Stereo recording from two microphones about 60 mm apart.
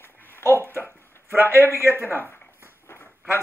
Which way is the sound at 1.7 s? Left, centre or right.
Right.